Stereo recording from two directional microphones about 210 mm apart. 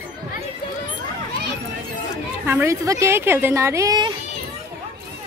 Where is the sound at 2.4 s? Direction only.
10° right (ahead or behind).